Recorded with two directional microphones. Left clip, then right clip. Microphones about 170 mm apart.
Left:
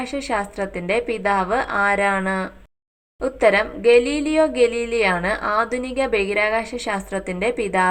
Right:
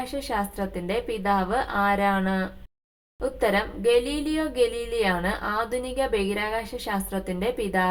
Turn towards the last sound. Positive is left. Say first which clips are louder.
# left 6 dB
turn(degrees=20)  # may be behind; listen again after turning